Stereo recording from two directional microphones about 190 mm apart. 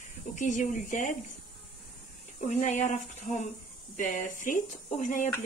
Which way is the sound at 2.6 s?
40° left (ahead or behind).